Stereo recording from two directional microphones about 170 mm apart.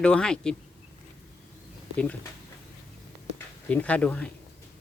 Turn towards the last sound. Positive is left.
turn(degrees=5)  # may be behind; listen again after turning